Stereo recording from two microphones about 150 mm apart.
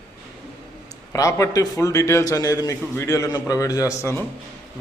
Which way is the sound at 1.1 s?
20° left (ahead or behind).